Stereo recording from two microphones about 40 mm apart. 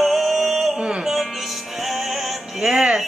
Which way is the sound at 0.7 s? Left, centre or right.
Right.